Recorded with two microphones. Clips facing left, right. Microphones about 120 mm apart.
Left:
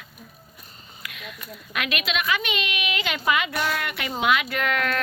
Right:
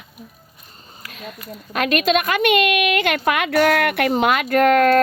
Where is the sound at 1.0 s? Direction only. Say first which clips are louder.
Right 5 dB; 40° right (ahead or behind).